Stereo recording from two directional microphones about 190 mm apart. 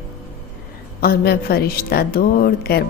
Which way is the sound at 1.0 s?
55° left (ahead or behind).